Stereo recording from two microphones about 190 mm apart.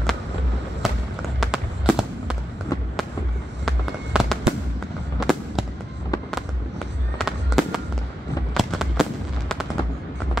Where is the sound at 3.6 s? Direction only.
Centre (ahead or behind).